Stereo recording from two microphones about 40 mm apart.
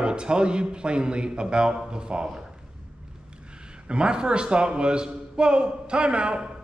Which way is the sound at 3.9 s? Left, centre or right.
Right.